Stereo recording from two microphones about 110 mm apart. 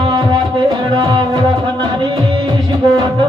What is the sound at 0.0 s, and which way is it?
Music, 45° right (ahead or behind).